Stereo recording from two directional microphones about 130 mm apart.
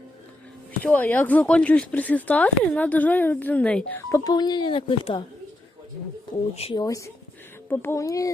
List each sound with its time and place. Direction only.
0.8 s speech: 10° left (ahead or behind)
4.1 s speech: 30° left (ahead or behind)
6.3 s speech: 45° left (ahead or behind)
6.7 s a child's voice: 25° left (ahead or behind)